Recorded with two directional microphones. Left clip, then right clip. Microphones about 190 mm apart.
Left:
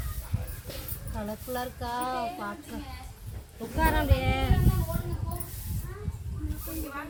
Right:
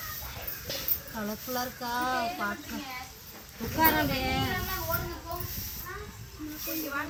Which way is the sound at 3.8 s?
40° left (ahead or behind).